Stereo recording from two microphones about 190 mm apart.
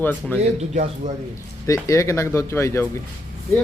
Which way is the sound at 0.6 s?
40° right (ahead or behind).